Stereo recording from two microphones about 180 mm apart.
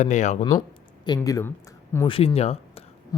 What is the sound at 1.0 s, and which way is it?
Speech, 20° left (ahead or behind).